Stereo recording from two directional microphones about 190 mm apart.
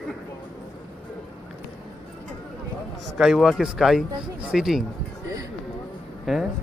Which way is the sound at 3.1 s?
Centre (ahead or behind).